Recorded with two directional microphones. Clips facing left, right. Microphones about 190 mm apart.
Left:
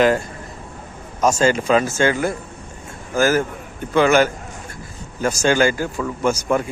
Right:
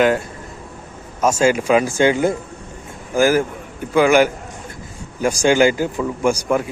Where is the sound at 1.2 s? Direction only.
10° right (ahead or behind).